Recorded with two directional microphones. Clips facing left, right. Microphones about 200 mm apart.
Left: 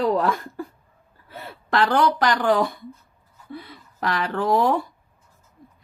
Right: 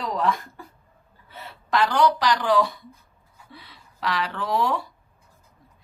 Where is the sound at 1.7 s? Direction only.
55° left (ahead or behind).